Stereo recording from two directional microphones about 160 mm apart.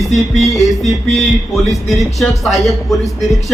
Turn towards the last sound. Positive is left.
turn(degrees=0)  # may be behind; listen again after turning